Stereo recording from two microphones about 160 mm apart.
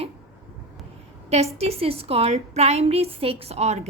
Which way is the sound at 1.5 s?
40° right (ahead or behind).